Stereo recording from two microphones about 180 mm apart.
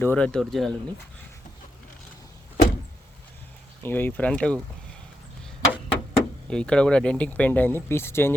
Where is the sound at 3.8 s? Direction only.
10° left (ahead or behind).